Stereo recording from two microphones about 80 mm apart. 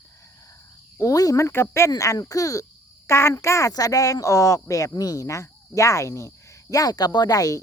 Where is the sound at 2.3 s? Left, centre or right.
Left.